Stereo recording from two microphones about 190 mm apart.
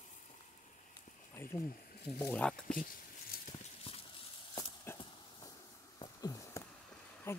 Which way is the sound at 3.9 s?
30° left (ahead or behind).